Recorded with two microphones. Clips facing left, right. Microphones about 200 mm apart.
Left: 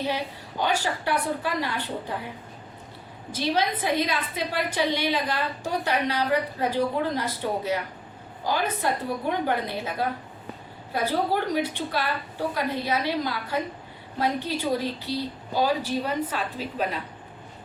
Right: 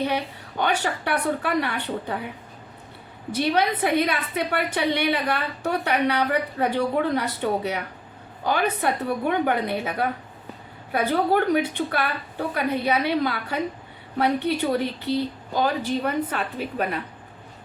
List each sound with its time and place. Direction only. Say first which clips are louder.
0.6 s a woman's voice: right 1 dB; 65° right (ahead or behind)
3.3 s a woman's voice: right 3 dB; 60° right (ahead or behind)